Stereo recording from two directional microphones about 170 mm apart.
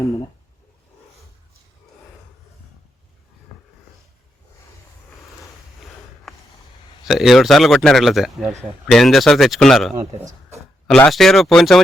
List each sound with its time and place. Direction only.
6.3 s a sound: centre (ahead or behind)
7.0 s speech: centre (ahead or behind)
9.9 s a man's voice: 15° right (ahead or behind)
10.8 s speech: 5° left (ahead or behind)